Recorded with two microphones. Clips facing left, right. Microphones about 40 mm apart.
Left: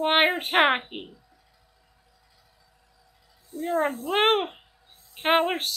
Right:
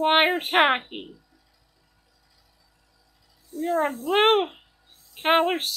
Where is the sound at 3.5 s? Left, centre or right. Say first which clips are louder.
Right 3 dB; left.